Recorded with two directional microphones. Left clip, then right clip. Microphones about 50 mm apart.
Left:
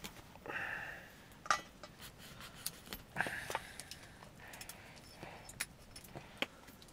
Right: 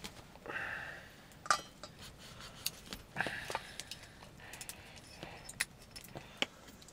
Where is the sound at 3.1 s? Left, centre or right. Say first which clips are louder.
Right 1 dB; left.